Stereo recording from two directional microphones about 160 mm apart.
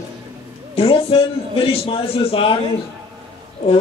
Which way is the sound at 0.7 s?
35° left (ahead or behind).